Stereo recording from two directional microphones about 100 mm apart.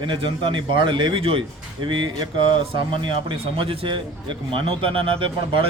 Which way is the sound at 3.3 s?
60° right (ahead or behind).